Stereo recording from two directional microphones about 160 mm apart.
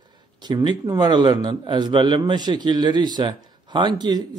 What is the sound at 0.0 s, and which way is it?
A man's voice, 25° right (ahead or behind).